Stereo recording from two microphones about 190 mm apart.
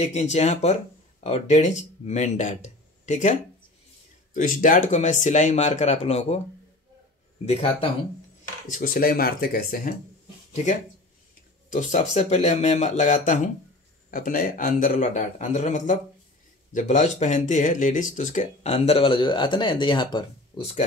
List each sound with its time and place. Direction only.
0.0 s speech: 35° left (ahead or behind)
7.4 s speech: 30° left (ahead or behind)
8.7 s a man's voice: 50° left (ahead or behind)
10.5 s a man's voice: 40° left (ahead or behind)